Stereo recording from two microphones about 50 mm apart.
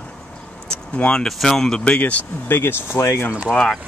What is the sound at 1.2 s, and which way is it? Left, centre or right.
Speech, centre.